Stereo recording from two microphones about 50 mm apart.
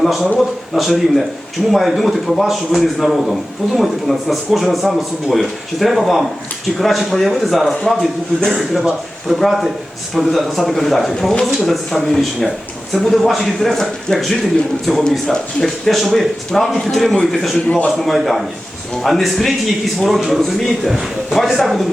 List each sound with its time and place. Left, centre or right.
0.0 s a man's voice: centre
17.7 s a man's voice: left
17.9 s a man's voice: centre